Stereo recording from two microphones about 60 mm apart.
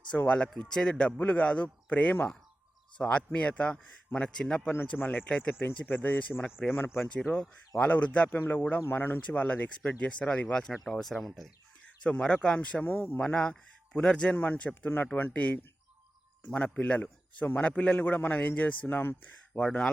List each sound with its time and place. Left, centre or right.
0.3 s speech: centre
4.9 s speech: left
6.6 s speech: centre
7.8 s speech: left
9.2 s speech: left
10.7 s speech: centre
12.0 s speech: centre
12.8 s speech: left
13.2 s speech: centre
14.3 s speech: left
16.8 s speech: left
19.5 s speech: centre